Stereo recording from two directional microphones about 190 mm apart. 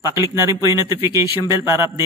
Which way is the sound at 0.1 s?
15° right (ahead or behind).